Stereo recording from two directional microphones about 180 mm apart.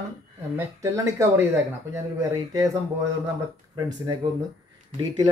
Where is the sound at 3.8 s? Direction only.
20° right (ahead or behind).